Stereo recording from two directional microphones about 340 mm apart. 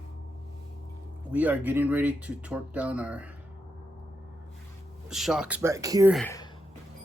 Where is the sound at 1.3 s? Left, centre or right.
Centre.